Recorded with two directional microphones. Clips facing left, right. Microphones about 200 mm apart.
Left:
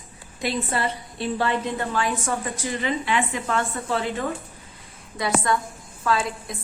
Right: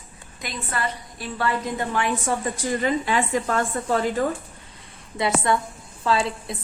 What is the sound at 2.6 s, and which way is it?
A woman's voice, 45° right (ahead or behind).